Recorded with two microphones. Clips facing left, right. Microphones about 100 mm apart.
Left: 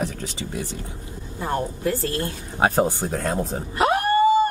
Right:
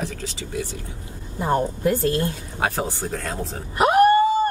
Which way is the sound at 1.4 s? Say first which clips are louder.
Right 4 dB; 20° right (ahead or behind).